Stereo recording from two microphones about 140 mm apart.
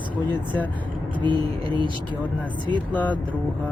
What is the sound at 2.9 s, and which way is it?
Speech, 10° left (ahead or behind).